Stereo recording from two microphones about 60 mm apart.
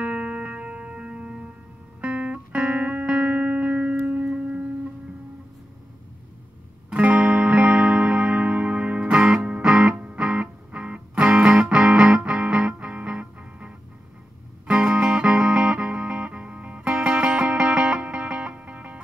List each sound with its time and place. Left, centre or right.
0.0 s music: right
6.9 s music: right